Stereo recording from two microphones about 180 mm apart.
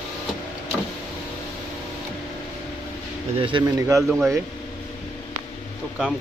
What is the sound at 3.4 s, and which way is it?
Speech, 25° right (ahead or behind).